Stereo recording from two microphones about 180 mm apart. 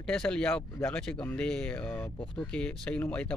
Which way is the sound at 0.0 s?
5° left (ahead or behind).